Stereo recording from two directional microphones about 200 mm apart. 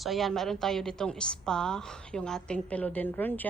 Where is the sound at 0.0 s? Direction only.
Centre (ahead or behind).